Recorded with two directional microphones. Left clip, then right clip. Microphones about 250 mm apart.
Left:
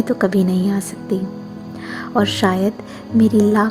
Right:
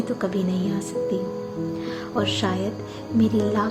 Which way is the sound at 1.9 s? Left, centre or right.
Left.